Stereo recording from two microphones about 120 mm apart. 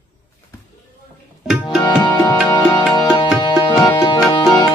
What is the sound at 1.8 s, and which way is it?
Music, 35° left (ahead or behind).